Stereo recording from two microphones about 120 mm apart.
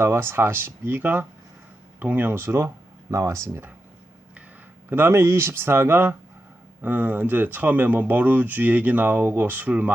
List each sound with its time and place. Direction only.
0.0 s speech: 20° right (ahead or behind)
4.9 s speech: 20° right (ahead or behind)